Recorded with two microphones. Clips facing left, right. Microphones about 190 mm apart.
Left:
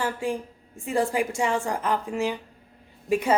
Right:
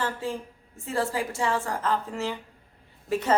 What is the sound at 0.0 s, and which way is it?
A woman's voice, 15° left (ahead or behind).